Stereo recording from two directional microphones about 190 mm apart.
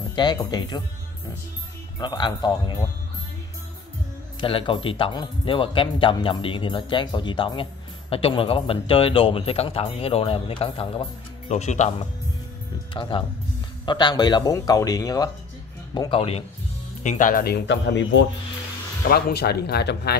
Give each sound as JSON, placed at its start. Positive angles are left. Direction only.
{"t": 0.1, "sound": "speech", "side_deg": 25}
{"t": 2.0, "sound": "speech", "side_deg": 25}
{"t": 4.4, "sound": "speech", "side_deg": 25}
{"t": 12.9, "sound": "speech", "side_deg": 25}
{"t": 17.0, "sound": "speech", "side_deg": 40}
{"t": 19.0, "sound": "speech", "side_deg": 55}